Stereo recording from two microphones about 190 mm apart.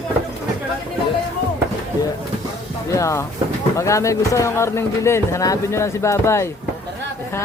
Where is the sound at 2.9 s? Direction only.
15° left (ahead or behind).